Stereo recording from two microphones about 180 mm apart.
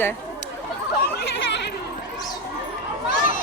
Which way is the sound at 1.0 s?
65° left (ahead or behind).